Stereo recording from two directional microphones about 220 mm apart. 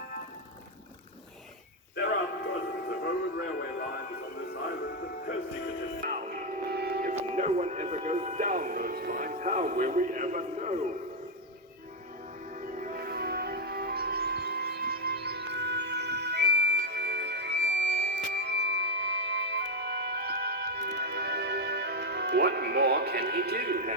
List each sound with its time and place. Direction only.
3.0 s music: 45° left (ahead or behind)
6.1 s music: 35° right (ahead or behind)
7.2 s music: 30° right (ahead or behind)
12.5 s music: 35° right (ahead or behind)